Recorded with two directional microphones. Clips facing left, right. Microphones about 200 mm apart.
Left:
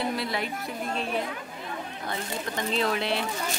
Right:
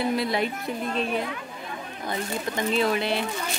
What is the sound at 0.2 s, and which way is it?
Speech, 20° right (ahead or behind).